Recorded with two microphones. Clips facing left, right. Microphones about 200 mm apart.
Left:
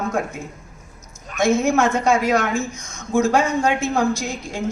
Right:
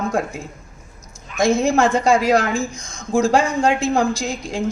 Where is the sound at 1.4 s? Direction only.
30° right (ahead or behind).